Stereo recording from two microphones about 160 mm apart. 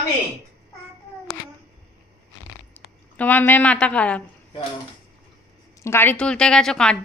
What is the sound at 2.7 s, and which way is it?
A woman's voice, 10° left (ahead or behind).